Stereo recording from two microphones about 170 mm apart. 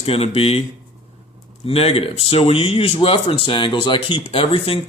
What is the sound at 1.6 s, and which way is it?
Speech, 35° left (ahead or behind).